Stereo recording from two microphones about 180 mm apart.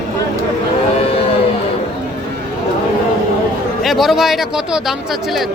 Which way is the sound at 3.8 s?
Centre (ahead or behind).